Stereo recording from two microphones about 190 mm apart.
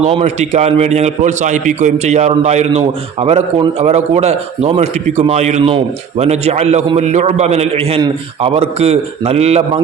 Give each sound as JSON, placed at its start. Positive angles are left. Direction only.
{"t": 0.0, "sound": "a man's voice", "side_deg": -35}